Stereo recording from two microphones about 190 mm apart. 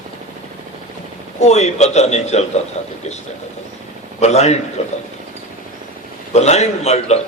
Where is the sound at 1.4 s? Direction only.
35° left (ahead or behind).